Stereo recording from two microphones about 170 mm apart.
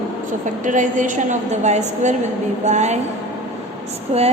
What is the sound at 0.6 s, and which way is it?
A woman's voice, 50° right (ahead or behind).